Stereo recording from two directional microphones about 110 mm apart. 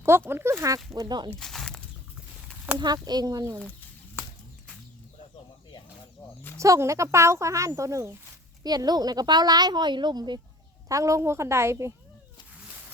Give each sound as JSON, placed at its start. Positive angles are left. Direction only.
{"t": 0.3, "sound": "speech", "side_deg": -20}
{"t": 0.9, "sound": "a woman's voice", "side_deg": -40}
{"t": 1.3, "sound": "a sound", "side_deg": 5}
{"t": 2.7, "sound": "a woman's voice", "side_deg": -40}
{"t": 6.6, "sound": "a woman's voice", "side_deg": -30}
{"t": 10.8, "sound": "speech", "side_deg": -30}